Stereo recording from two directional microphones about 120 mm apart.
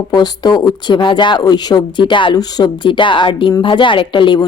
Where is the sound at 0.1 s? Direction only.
35° left (ahead or behind).